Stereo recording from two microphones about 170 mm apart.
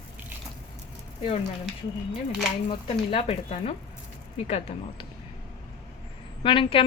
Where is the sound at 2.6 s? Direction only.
35° left (ahead or behind).